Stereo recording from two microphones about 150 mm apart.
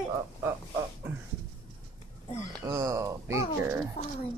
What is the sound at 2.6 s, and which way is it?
Speech, 20° right (ahead or behind).